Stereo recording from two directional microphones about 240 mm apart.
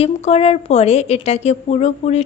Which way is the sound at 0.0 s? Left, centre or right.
Left.